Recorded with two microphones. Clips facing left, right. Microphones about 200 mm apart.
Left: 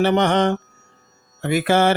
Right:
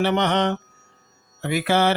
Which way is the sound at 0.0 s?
45° left (ahead or behind).